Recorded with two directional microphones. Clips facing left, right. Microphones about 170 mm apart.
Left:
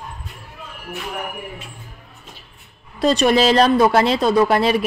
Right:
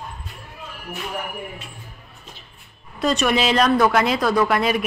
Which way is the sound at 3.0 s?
35° left (ahead or behind).